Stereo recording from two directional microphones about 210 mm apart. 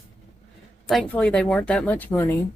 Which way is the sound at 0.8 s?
Centre (ahead or behind).